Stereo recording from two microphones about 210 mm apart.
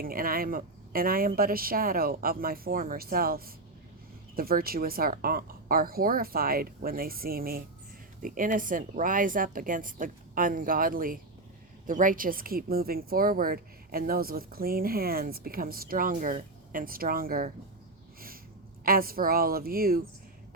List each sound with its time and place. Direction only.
0.0 s a woman's voice: 45° right (ahead or behind)
18.9 s speech: 45° right (ahead or behind)